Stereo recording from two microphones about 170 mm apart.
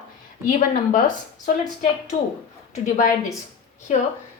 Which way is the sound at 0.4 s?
50° left (ahead or behind).